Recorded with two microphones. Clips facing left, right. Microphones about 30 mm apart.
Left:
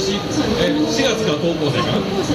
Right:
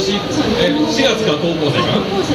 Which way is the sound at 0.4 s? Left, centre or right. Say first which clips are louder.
Right 2 dB; right.